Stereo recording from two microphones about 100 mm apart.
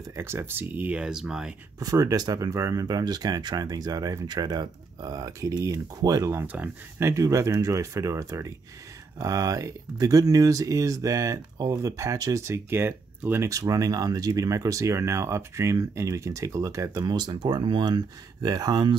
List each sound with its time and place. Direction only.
0.1 s speech: 25° right (ahead or behind); by 1.5 s 5° right (ahead or behind)
1.8 s speech: 40° right (ahead or behind)
6.4 s speech: 15° right (ahead or behind)
7.0 s speech: 30° right (ahead or behind)
13.5 s speech: 35° right (ahead or behind)